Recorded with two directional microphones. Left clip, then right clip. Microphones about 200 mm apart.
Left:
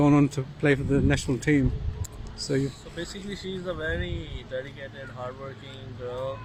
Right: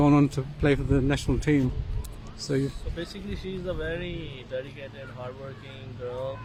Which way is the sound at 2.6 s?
10° right (ahead or behind).